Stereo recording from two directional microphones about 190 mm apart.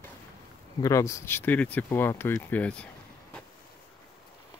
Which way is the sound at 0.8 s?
15° left (ahead or behind).